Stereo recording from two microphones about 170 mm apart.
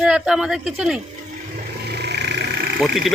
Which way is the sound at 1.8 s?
75° right (ahead or behind).